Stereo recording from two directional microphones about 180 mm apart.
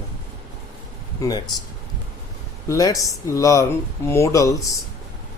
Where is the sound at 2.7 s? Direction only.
20° left (ahead or behind).